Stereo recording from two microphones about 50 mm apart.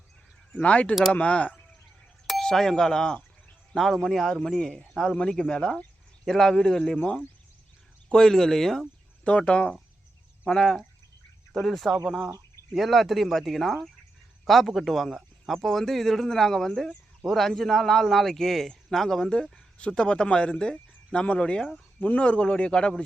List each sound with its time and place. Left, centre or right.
0.6 s speech: left
2.4 s speech: centre
9.2 s speech: left
10.4 s a man's voice: centre